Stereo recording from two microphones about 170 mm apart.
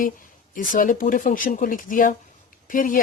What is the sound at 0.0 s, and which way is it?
Speech, 50° left (ahead or behind).